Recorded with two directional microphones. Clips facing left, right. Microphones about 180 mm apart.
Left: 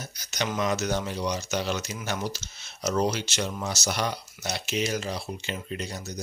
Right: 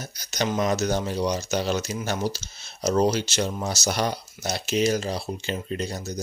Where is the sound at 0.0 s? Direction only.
35° right (ahead or behind).